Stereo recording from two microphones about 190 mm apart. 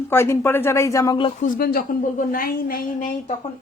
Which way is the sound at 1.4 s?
45° left (ahead or behind).